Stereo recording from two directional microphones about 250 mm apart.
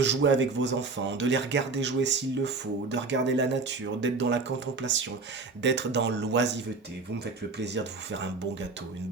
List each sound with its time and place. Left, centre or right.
0.0 s speech: right